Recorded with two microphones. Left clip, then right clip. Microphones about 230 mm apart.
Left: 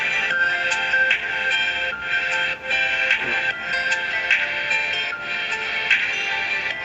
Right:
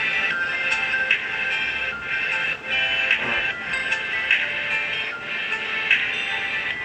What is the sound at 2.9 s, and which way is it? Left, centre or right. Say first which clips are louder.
Music: left 1 dB; left.